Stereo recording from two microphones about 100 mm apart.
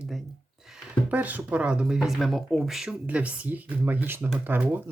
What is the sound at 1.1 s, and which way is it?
Speech, 15° right (ahead or behind).